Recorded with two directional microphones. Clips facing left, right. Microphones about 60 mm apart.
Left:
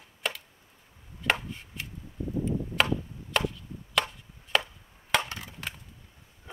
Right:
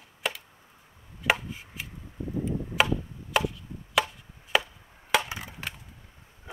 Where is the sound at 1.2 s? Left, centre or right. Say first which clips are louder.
Right 2 dB; centre.